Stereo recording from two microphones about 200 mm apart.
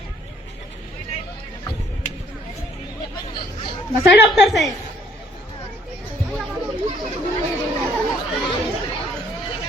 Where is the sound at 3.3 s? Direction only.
25° left (ahead or behind).